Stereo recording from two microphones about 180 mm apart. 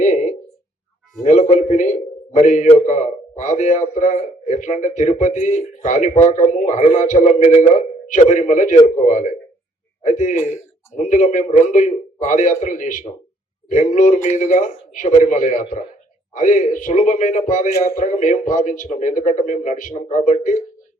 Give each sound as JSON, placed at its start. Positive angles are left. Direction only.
{"t": 0.0, "sound": "a sound", "side_deg": 45}
{"t": 1.2, "sound": "a man's voice", "side_deg": 45}
{"t": 10.3, "sound": "a man's voice", "side_deg": 15}
{"t": 10.9, "sound": "a man's voice", "side_deg": 45}